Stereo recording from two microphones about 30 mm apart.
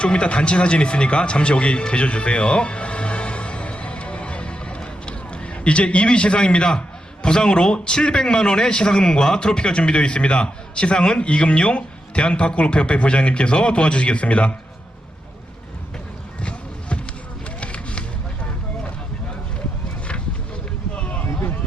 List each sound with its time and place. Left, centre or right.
0.0 s a man's voice: left
1.8 s music: left
6.7 s a man's voice: left
11.2 s a man's voice: left
16.4 s music: left
20.9 s a sound: left